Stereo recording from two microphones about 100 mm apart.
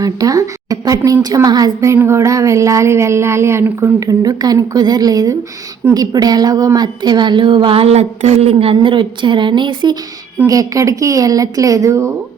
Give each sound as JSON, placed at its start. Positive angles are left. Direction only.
{"t": 0.0, "sound": "a woman's voice", "side_deg": -35}
{"t": 4.0, "sound": "a woman's voice", "side_deg": -35}
{"t": 10.4, "sound": "a woman's voice", "side_deg": -35}